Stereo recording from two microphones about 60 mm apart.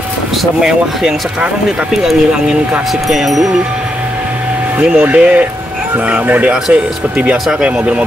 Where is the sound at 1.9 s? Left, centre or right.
Centre.